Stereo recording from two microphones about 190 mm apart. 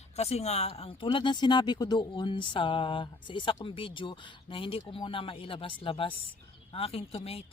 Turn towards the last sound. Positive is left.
turn(degrees=30)  # may be behind; listen again after turning